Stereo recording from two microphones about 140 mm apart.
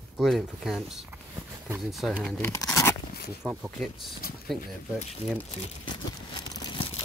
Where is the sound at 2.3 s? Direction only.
15° left (ahead or behind).